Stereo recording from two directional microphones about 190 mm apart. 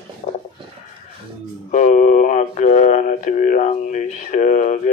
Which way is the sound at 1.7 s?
40° left (ahead or behind).